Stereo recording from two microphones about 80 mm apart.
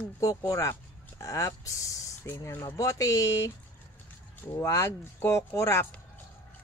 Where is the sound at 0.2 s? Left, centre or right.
Left.